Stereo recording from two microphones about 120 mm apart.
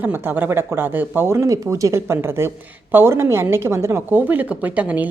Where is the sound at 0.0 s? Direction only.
15° right (ahead or behind).